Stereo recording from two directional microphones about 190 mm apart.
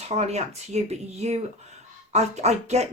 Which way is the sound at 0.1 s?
35° right (ahead or behind).